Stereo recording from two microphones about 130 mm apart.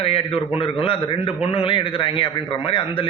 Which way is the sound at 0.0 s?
45° left (ahead or behind).